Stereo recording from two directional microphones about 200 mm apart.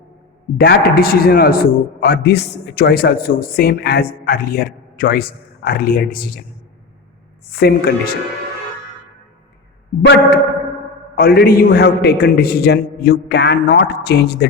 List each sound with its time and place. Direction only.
0.6 s a man's voice: 50° left (ahead or behind)
7.5 s a man's voice: 50° left (ahead or behind)
10.1 s a sound: 55° left (ahead or behind)
11.1 s a man's voice: 50° left (ahead or behind)